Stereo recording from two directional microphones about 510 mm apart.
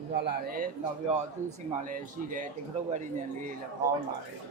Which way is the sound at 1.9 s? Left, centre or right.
Centre.